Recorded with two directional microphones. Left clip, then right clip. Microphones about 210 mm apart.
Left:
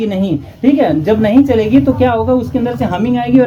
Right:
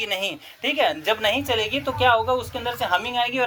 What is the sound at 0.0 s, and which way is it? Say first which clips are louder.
A woman's voice: left 8 dB; 35° right (ahead or behind).